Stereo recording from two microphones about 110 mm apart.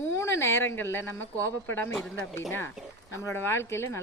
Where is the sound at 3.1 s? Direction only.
25° left (ahead or behind).